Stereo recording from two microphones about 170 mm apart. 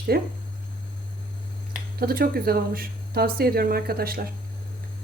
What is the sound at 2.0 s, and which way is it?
A woman's voice, 65° right (ahead or behind).